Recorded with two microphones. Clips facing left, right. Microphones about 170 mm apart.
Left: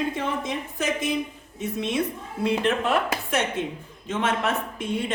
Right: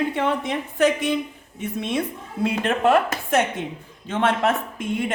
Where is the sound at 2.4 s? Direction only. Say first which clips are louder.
Right 2 dB; 50° right (ahead or behind).